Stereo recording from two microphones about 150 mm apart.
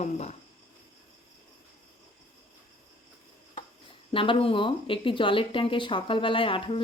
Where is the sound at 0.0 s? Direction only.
50° left (ahead or behind).